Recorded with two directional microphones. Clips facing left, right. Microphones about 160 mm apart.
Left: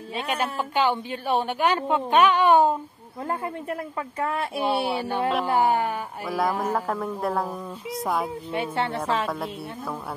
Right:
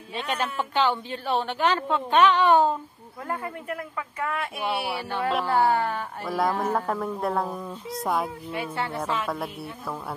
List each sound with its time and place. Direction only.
0.7 s a woman's voice: 15° left (ahead or behind)
3.3 s a woman's voice: 25° left (ahead or behind)
6.2 s a woman's voice: centre (ahead or behind)
8.5 s speech: 25° left (ahead or behind)
9.3 s a woman's voice: centre (ahead or behind)